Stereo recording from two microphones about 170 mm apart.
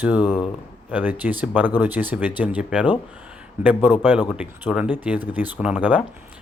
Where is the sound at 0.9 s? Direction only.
10° right (ahead or behind).